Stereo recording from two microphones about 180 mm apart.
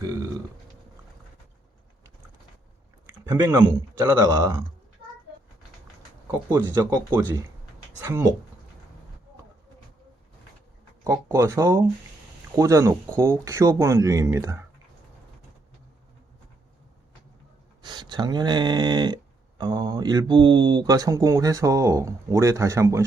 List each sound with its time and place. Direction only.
0.0 s a sound: 20° right (ahead or behind)
3.1 s speech: 20° right (ahead or behind)
8.0 s speech: 15° right (ahead or behind)
11.0 s speech: 15° right (ahead or behind)
17.8 s speech: 25° right (ahead or behind)